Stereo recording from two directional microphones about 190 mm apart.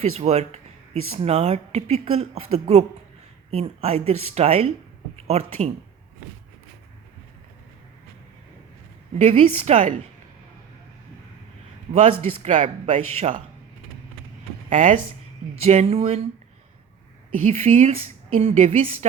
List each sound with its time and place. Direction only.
0.2 s speech: 35° right (ahead or behind)
9.1 s a woman's voice: 30° right (ahead or behind)
11.9 s a man's voice: 40° right (ahead or behind)
14.7 s speech: 40° right (ahead or behind)
17.4 s speech: 35° right (ahead or behind)